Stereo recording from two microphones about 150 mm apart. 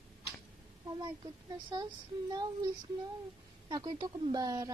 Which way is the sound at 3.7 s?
25° right (ahead or behind).